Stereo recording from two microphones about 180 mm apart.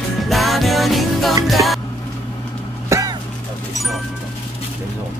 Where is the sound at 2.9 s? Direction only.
20° right (ahead or behind).